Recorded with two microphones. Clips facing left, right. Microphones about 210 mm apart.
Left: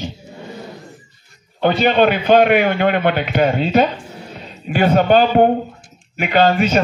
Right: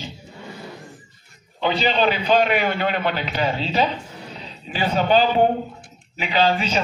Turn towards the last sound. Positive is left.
turn(degrees=55)  # may be behind; listen again after turning